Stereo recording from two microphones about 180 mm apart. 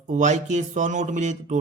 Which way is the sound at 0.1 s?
40° right (ahead or behind).